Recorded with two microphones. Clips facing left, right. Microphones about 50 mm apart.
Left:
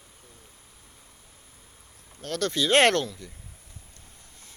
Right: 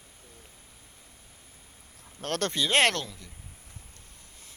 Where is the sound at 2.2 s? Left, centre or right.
Right.